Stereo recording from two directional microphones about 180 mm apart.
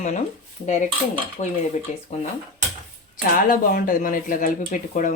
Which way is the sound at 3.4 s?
50° left (ahead or behind).